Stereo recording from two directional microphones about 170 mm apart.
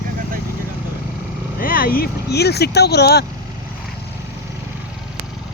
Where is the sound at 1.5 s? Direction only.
55° left (ahead or behind); by 3.2 s 75° left (ahead or behind).